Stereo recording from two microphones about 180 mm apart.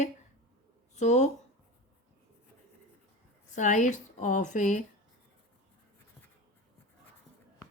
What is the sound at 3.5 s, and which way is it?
Speech, 40° left (ahead or behind).